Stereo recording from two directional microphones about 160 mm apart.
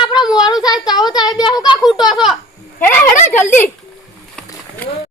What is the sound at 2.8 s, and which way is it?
Speech, 15° left (ahead or behind).